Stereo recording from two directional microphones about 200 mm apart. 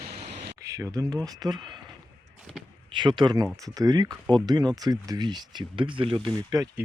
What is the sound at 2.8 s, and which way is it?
Speech, 25° right (ahead or behind).